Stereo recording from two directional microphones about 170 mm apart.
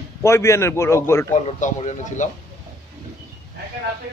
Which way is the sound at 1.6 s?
45° left (ahead or behind).